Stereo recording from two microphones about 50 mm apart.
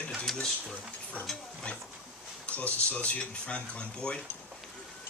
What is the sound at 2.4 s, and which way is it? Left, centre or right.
Speech, left.